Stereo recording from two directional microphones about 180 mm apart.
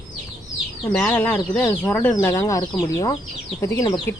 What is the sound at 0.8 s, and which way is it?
Speech, 10° left (ahead or behind).